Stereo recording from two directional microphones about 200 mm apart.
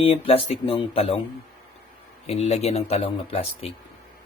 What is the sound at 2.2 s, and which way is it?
Speech, 30° left (ahead or behind).